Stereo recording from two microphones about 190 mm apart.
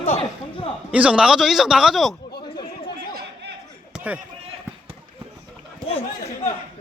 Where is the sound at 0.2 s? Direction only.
30° left (ahead or behind).